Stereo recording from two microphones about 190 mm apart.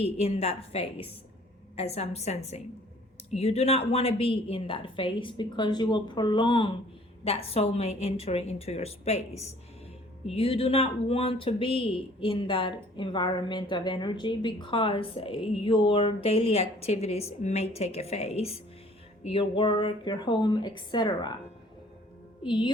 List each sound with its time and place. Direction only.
0.0 s a woman's voice: 35° left (ahead or behind)
22.4 s speech: 25° left (ahead or behind)